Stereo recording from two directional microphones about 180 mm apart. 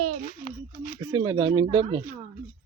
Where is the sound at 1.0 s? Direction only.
25° right (ahead or behind).